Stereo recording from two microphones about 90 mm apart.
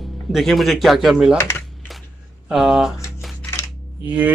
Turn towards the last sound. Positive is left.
turn(degrees=-20)  # may be behind; listen again after turning